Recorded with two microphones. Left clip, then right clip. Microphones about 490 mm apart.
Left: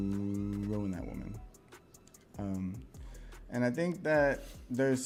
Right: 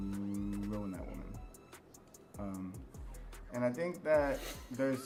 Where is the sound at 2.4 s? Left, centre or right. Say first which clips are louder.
Left 4 dB; left.